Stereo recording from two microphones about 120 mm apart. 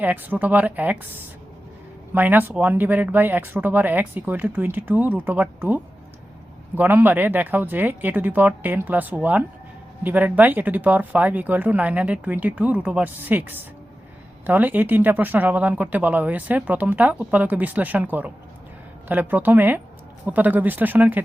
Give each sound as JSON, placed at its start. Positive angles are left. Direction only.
{"t": 0.0, "sound": "speech", "side_deg": -15}